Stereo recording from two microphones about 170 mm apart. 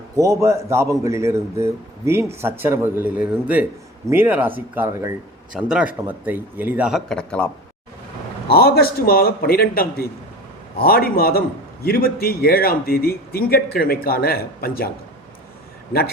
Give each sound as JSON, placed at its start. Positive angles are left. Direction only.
{"t": 0.2, "sound": "a man's voice", "side_deg": -15}
{"t": 8.4, "sound": "a man's voice", "side_deg": 65}